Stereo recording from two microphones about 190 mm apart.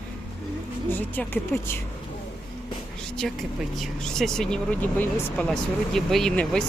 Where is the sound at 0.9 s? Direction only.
10° left (ahead or behind).